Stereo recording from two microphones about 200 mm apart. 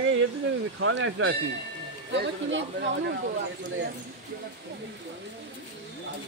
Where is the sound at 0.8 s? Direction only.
75° right (ahead or behind).